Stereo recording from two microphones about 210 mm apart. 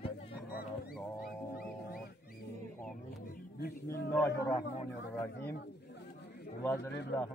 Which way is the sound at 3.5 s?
50° left (ahead or behind).